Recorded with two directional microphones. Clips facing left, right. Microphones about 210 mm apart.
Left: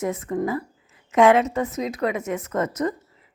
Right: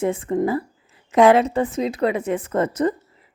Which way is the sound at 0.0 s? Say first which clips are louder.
Right 4 dB; 30° right (ahead or behind).